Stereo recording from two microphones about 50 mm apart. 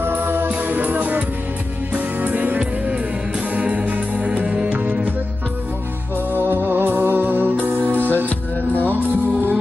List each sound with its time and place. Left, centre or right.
0.0 s music: right
2.0 s music: right
6.3 s music: right